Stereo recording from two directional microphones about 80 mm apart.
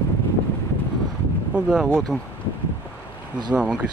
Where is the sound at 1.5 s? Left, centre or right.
Centre.